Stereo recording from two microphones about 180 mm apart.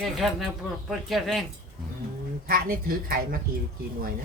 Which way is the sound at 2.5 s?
50° right (ahead or behind).